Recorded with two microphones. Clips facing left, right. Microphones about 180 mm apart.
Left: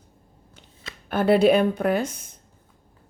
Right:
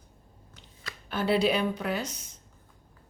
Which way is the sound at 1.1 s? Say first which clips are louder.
Left 8 dB; 55° left (ahead or behind).